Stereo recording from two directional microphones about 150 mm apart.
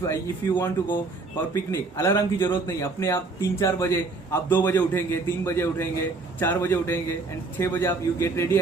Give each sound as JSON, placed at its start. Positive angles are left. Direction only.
{"t": 0.0, "sound": "speech", "side_deg": 20}